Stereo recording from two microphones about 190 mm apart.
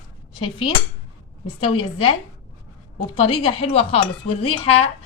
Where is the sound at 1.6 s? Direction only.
30° left (ahead or behind).